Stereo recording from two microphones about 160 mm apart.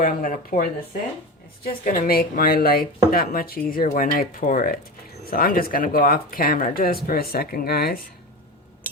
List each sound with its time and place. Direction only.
0.0 s speech: 60° left (ahead or behind)
1.8 s speech: 60° left (ahead or behind)